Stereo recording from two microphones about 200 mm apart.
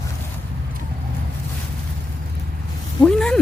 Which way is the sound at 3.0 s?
5° left (ahead or behind).